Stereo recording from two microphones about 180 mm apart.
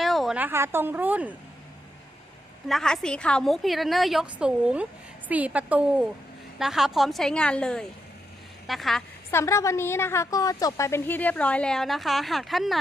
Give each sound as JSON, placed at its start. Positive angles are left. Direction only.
{"t": 0.0, "sound": "a woman's voice", "side_deg": 0}
{"t": 2.6, "sound": "a woman's voice", "side_deg": 0}
{"t": 9.3, "sound": "a woman's voice", "side_deg": 15}